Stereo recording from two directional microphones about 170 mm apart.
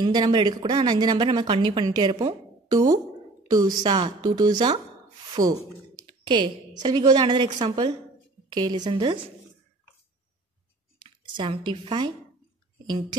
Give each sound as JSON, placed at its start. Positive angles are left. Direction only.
{"t": 0.0, "sound": "a woman's voice", "side_deg": -25}
{"t": 3.4, "sound": "a woman's voice", "side_deg": -20}
{"t": 5.4, "sound": "speech", "side_deg": -50}
{"t": 6.2, "sound": "a woman's voice", "side_deg": -25}
{"t": 11.3, "sound": "a woman's voice", "side_deg": -30}